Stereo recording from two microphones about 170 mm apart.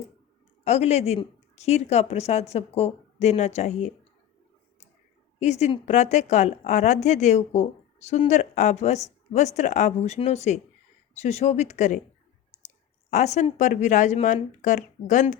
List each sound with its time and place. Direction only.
0.6 s speech: 40° left (ahead or behind)
5.4 s a woman's voice: 40° left (ahead or behind)